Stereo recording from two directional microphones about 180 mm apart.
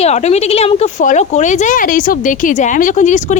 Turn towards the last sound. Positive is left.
turn(degrees=40)  # may be behind; listen again after turning